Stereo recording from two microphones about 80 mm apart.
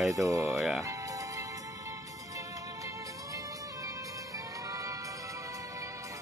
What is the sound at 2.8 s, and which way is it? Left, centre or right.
Music, right.